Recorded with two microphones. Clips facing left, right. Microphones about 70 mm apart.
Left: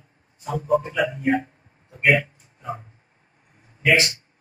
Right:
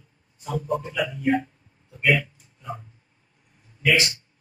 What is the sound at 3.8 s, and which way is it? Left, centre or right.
Speech, left.